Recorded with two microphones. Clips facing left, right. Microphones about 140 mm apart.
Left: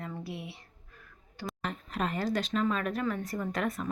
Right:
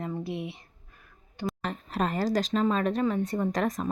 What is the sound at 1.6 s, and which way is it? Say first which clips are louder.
Speech: right 2 dB; 35° right (ahead or behind).